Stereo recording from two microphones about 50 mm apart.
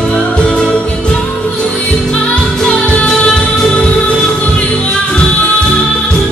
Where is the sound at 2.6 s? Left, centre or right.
Left.